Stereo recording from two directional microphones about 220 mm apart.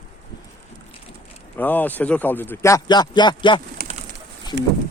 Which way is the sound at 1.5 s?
10° left (ahead or behind).